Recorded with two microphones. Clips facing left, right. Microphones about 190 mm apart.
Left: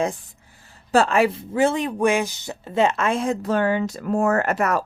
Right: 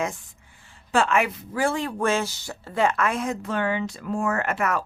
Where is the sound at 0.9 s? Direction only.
35° left (ahead or behind).